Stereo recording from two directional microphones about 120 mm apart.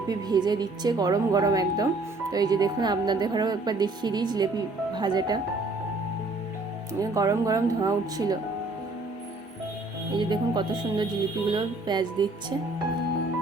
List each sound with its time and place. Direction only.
0.1 s a woman's voice: 35° right (ahead or behind)
7.0 s speech: 30° right (ahead or behind)
10.2 s a woman's voice: 40° right (ahead or behind)